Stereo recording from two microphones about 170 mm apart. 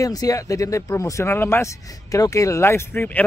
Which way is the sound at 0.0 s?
20° left (ahead or behind).